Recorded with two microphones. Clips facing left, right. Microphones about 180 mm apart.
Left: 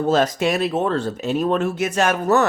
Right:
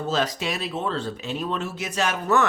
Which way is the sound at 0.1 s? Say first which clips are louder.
Left 7 dB; 50° left (ahead or behind).